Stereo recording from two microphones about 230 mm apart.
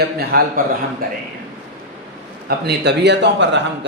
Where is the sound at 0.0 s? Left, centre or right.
Right.